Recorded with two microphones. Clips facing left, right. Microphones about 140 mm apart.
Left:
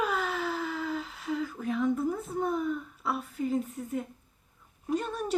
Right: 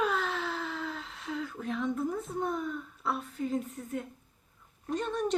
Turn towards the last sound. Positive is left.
turn(degrees=5)  # may be behind; listen again after turning